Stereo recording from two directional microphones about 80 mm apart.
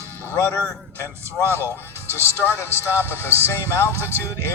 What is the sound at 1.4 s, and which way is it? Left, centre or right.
Speech, right.